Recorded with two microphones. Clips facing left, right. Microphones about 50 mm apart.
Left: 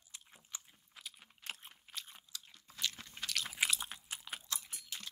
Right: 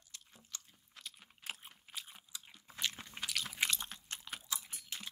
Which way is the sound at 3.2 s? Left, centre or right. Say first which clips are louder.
Even; centre.